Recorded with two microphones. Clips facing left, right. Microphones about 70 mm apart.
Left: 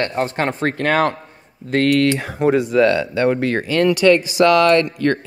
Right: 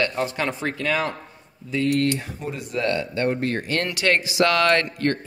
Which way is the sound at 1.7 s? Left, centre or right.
Left.